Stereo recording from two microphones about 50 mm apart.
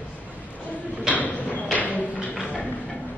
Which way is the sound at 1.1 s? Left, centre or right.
Left.